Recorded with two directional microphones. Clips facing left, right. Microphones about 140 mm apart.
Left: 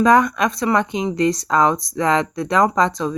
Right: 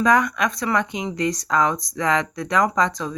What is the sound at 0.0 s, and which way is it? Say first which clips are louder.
Speech: left 4 dB; 30° left (ahead or behind).